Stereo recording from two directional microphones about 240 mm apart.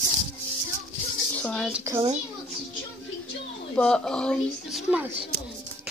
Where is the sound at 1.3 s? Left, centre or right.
Centre.